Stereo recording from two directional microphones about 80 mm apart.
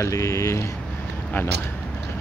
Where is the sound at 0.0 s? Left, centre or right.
Left.